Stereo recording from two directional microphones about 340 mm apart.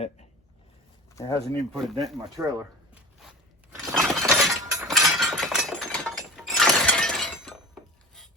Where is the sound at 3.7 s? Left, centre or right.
Centre.